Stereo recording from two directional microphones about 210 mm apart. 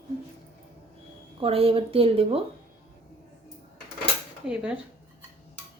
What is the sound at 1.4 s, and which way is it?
Speech, 25° right (ahead or behind).